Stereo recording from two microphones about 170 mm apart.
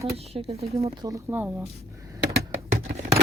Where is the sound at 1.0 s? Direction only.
15° right (ahead or behind).